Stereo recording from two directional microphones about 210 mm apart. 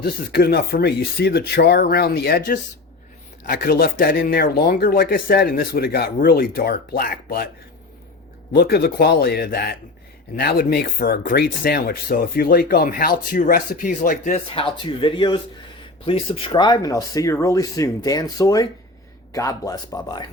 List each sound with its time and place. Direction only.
0.0 s speech: 45° left (ahead or behind)
8.5 s speech: 50° left (ahead or behind)
14.5 s speech: 25° left (ahead or behind)